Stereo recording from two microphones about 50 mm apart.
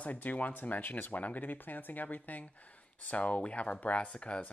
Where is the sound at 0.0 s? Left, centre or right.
Left.